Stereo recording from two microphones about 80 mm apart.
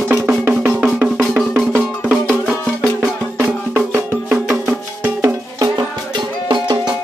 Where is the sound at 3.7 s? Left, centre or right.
Right.